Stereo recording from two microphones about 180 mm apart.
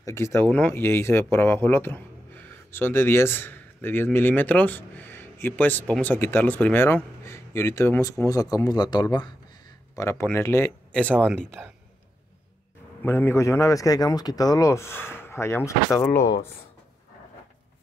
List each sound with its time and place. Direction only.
0.0 s speech: 15° left (ahead or behind)
13.0 s speech: 10° left (ahead or behind)